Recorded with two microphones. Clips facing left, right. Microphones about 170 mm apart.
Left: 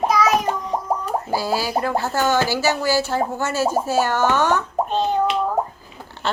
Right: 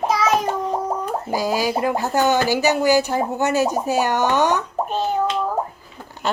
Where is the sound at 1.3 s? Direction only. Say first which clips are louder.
Right 2 dB; 15° right (ahead or behind).